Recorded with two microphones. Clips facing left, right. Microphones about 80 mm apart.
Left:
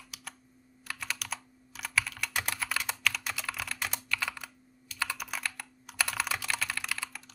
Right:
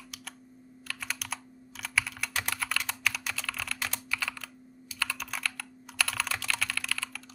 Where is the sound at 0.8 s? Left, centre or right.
Centre.